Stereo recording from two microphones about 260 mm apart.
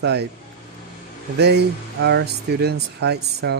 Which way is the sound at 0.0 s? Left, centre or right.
Right.